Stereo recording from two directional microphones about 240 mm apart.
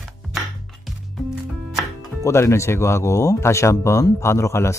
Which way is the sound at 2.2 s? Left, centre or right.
Centre.